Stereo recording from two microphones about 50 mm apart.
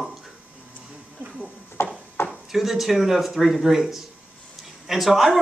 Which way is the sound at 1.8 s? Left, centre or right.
Left.